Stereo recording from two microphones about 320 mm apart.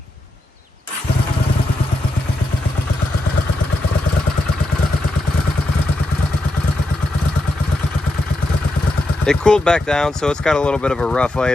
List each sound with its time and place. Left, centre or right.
9.2 s speech: centre